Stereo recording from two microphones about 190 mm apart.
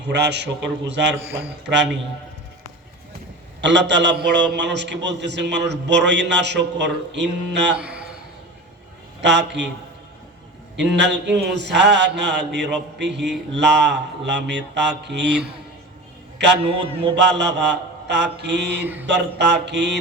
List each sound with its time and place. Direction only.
0.0 s mantra: 65° right (ahead or behind)
1.4 s a man's voice: 65° right (ahead or behind)
3.6 s a man's voice: 70° right (ahead or behind)
7.8 s a sound: 5° right (ahead or behind)
9.2 s a man's voice: 65° right (ahead or behind)
10.9 s a man's voice: 65° right (ahead or behind)
13.0 s mantra: 65° right (ahead or behind)
13.5 s a man's voice: 65° right (ahead or behind)
16.4 s mantra: 65° right (ahead or behind)
19.0 s a man's voice: 70° right (ahead or behind)